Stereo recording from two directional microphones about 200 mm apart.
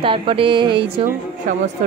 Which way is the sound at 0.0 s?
25° right (ahead or behind).